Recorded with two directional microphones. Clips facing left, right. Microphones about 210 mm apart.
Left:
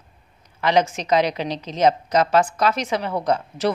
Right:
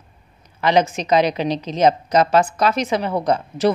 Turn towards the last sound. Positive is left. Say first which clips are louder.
# right 3 dB
turn(degrees=-20)  # may be behind; listen again after turning